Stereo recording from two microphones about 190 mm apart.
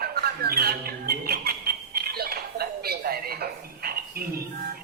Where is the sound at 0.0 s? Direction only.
55° right (ahead or behind).